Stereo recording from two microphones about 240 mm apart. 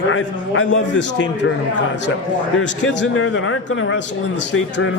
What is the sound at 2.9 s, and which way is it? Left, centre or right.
A man's voice, left.